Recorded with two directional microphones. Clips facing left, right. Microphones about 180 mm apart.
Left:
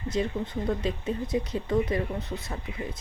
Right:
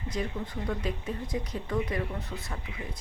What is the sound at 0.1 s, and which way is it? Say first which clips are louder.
Speech: left 5 dB; 25° left (ahead or behind).